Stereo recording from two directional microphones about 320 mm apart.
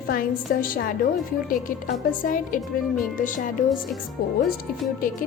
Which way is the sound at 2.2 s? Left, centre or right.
Left.